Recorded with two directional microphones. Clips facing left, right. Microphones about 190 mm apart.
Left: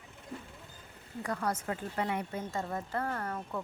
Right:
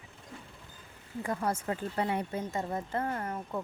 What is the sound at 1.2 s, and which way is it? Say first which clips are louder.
A woman's voice: right 2 dB; 25° right (ahead or behind).